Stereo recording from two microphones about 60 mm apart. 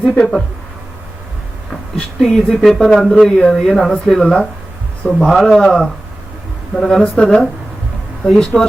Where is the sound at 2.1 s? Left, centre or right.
Centre.